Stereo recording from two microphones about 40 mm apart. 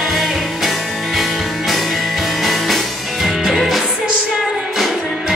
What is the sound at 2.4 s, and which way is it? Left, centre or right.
Music, centre.